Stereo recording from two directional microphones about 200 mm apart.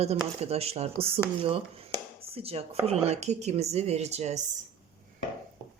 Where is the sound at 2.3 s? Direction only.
30° right (ahead or behind).